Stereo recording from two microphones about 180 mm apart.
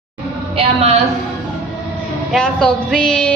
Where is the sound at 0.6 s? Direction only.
35° right (ahead or behind).